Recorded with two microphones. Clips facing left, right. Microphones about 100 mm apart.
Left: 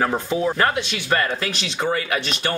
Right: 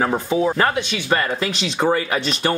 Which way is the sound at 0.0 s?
10° right (ahead or behind).